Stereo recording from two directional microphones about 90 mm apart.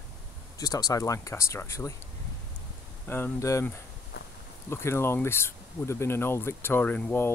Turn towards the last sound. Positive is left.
turn(degrees=20)  # may be behind; listen again after turning